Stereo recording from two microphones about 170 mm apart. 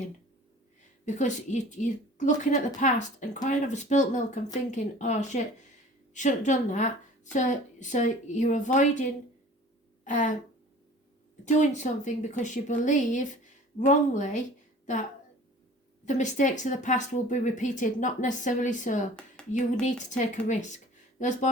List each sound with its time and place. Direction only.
1.0 s a woman's voice: 45° left (ahead or behind)
10.0 s a sound: 45° left (ahead or behind)
11.4 s a woman's voice: 45° left (ahead or behind)
16.0 s a woman's voice: 45° left (ahead or behind)
19.4 s a sound: 5° left (ahead or behind)
19.8 s speech: 45° left (ahead or behind)